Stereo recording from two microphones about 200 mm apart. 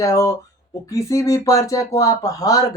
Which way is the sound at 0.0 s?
15° left (ahead or behind).